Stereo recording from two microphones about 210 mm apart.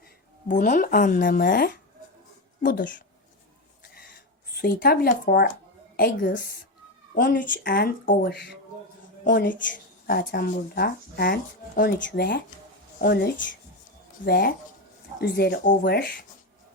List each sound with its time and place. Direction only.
0.4 s speech: 35° left (ahead or behind)
4.5 s speech: 45° left (ahead or behind)